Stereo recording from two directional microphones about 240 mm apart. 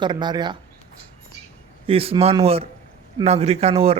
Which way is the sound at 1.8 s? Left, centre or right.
Right.